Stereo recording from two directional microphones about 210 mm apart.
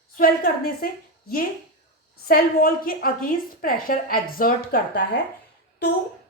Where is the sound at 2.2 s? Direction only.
45° left (ahead or behind).